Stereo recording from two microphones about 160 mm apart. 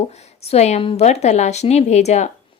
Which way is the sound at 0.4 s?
45° left (ahead or behind).